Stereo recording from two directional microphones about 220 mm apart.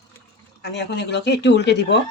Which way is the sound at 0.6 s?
50° left (ahead or behind).